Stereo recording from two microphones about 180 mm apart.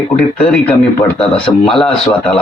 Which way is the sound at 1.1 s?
30° left (ahead or behind).